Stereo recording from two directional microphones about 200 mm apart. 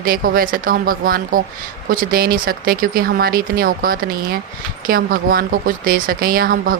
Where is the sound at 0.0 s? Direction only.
45° right (ahead or behind).